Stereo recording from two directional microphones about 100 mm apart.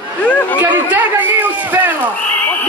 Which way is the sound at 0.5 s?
15° right (ahead or behind).